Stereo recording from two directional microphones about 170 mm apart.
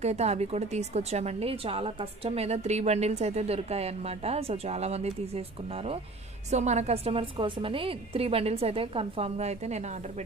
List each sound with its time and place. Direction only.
0.0 s speech: 40° right (ahead or behind)